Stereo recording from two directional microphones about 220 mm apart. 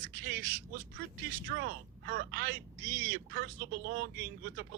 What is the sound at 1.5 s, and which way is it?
Speech, 45° right (ahead or behind).